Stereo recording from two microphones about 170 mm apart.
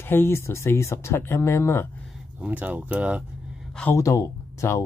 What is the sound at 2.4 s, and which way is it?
Speech, 10° right (ahead or behind).